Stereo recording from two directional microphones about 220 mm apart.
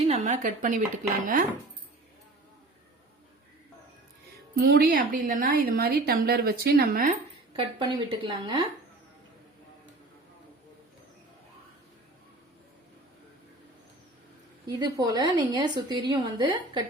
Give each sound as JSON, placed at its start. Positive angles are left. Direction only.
{"t": 0.1, "sound": "speech", "side_deg": -30}
{"t": 4.5, "sound": "a woman's voice", "side_deg": -45}
{"t": 7.5, "sound": "a woman's voice", "side_deg": -20}
{"t": 14.7, "sound": "a woman's voice", "side_deg": -15}